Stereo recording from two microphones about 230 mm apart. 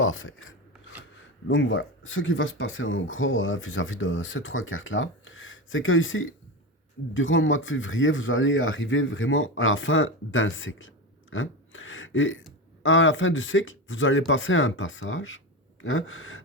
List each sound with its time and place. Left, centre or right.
0.0 s speech: left